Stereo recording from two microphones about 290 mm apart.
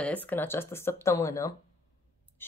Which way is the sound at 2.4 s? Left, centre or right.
Centre.